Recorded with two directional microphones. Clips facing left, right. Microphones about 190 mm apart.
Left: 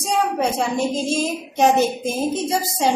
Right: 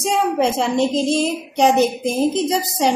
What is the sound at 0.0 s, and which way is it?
A woman's voice, 25° right (ahead or behind).